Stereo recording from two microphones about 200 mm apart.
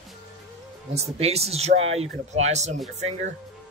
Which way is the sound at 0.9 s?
30° right (ahead or behind).